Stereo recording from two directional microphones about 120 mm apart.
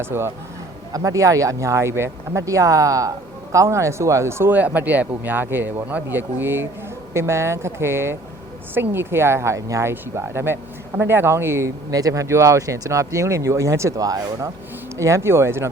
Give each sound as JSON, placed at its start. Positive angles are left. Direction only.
{"t": 0.0, "sound": "speech", "side_deg": -20}